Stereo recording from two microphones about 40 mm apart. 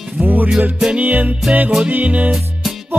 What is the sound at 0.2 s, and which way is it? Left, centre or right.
Music, right.